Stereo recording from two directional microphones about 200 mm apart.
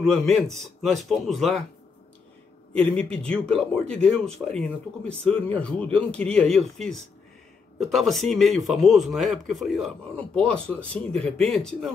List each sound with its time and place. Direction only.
0.0 s speech: centre (ahead or behind)
2.7 s speech: 5° left (ahead or behind)